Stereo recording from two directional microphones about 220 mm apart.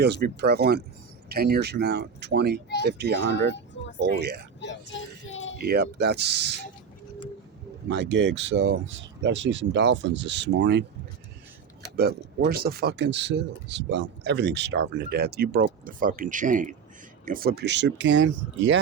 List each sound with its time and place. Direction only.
0.0 s speech: 50° right (ahead or behind)
4.6 s child singing: 55° left (ahead or behind)
5.5 s speech: 45° right (ahead or behind)
7.9 s speech: 50° right (ahead or behind)
11.9 s speech: 45° right (ahead or behind)